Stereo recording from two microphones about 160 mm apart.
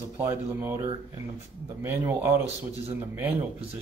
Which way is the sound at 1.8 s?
15° right (ahead or behind).